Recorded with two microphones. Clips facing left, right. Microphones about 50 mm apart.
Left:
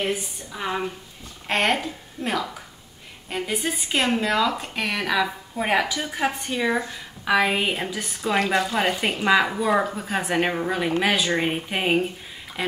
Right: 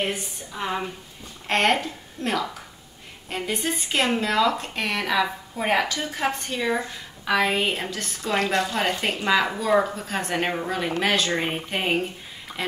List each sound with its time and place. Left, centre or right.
0.1 s a woman's voice: centre